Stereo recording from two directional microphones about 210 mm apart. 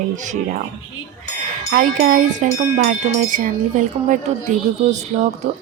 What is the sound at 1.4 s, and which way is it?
Speech, 40° right (ahead or behind).